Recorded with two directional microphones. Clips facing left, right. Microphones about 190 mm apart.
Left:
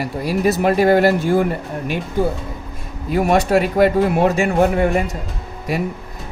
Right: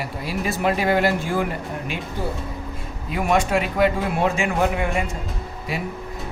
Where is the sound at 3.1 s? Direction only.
40° left (ahead or behind).